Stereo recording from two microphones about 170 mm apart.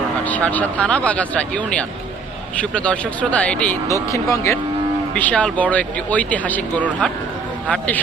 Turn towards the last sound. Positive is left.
turn(degrees=10)  # may be behind; listen again after turning